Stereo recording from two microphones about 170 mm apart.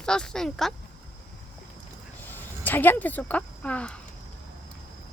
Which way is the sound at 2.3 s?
10° left (ahead or behind).